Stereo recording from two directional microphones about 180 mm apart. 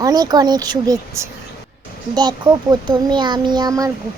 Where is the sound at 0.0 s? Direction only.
20° right (ahead or behind).